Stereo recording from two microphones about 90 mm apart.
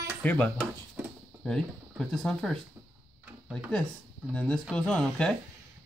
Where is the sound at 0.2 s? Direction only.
15° left (ahead or behind).